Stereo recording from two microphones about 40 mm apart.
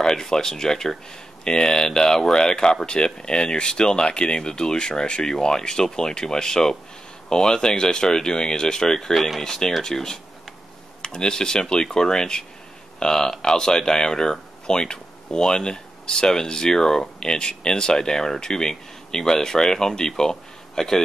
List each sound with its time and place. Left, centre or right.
0.0 s speech: centre